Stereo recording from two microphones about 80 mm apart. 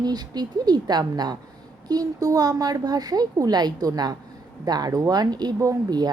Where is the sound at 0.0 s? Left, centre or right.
Right.